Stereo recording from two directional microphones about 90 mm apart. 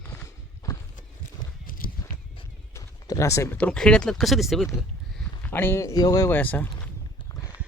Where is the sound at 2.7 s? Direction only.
35° left (ahead or behind).